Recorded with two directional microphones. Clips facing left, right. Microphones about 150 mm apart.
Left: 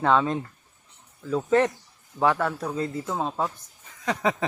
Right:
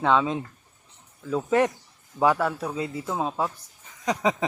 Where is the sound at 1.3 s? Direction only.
5° right (ahead or behind).